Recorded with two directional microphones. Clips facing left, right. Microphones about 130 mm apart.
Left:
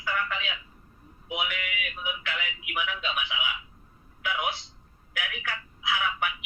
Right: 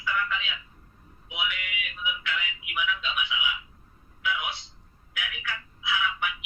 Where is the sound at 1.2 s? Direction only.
50° left (ahead or behind).